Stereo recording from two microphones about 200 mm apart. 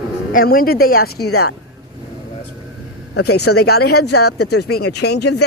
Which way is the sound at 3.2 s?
55° left (ahead or behind).